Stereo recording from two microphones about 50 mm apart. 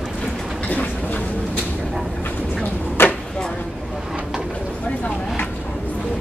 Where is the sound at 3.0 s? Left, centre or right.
Left.